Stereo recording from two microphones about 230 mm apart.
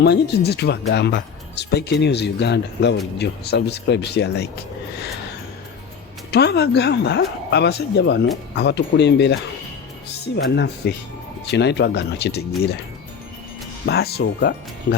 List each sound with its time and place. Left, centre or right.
0.0 s speech: left
6.3 s speech: left
10.3 s speech: left
13.8 s speech: left